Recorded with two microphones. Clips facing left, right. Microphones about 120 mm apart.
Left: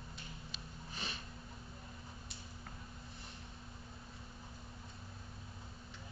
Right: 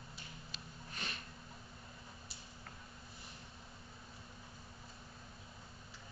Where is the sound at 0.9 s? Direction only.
Centre (ahead or behind).